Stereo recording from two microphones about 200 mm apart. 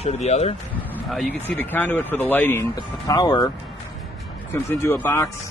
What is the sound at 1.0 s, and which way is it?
Speech, 5° left (ahead or behind).